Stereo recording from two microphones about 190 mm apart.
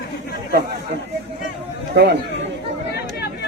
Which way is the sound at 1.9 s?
60° right (ahead or behind).